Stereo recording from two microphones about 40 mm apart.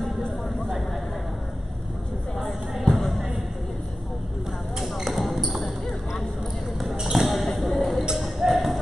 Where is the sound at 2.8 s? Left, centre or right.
Centre.